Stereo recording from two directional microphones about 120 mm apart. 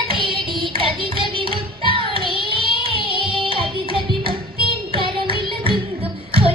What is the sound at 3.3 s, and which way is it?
Music, 45° right (ahead or behind).